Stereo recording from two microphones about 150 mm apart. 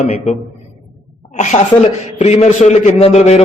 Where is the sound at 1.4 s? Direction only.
55° left (ahead or behind).